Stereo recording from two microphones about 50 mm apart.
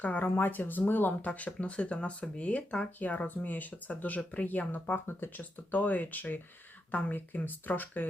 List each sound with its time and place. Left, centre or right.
0.0 s speech: left
0.3 s speech: left
1.3 s speech: left